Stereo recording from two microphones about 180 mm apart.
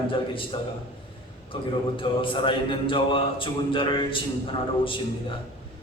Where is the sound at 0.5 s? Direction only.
25° left (ahead or behind).